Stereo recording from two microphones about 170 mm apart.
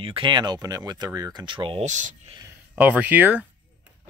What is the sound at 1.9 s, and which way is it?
Speech, 45° right (ahead or behind).